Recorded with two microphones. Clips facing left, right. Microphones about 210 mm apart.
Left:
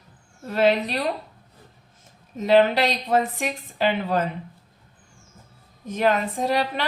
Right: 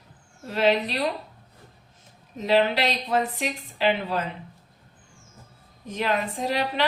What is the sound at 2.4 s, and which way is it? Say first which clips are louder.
A woman's voice: left 4 dB; 45° left (ahead or behind).